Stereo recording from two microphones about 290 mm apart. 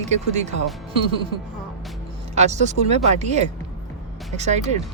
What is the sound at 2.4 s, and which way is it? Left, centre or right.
Speech, right.